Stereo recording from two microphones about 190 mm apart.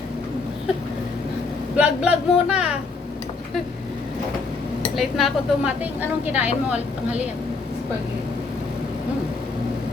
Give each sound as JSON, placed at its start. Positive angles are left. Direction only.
{"t": 1.7, "sound": "speech", "side_deg": -5}
{"t": 4.9, "sound": "a woman's voice", "side_deg": 0}